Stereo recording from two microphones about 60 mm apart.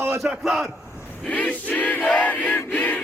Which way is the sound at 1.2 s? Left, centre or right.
Left.